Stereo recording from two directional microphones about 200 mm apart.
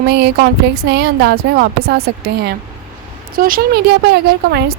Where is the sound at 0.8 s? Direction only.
55° right (ahead or behind).